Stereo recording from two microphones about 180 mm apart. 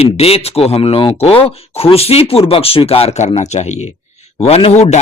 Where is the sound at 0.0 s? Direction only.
35° left (ahead or behind).